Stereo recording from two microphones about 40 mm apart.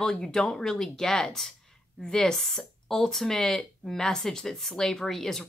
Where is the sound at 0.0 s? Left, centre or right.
Centre.